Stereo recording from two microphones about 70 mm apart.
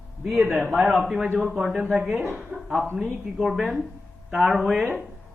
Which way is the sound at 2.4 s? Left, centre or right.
Centre.